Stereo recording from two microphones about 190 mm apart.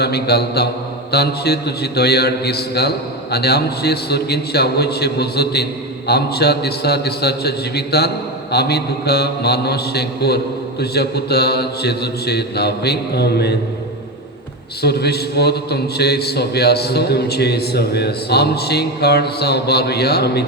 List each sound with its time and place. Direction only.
0.0 s a man's voice: 55° left (ahead or behind)
14.8 s a man's voice: 60° left (ahead or behind)